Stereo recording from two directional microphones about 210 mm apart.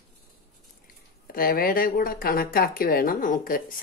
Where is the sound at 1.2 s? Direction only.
45° left (ahead or behind).